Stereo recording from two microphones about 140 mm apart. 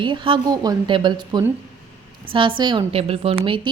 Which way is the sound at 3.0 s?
45° right (ahead or behind).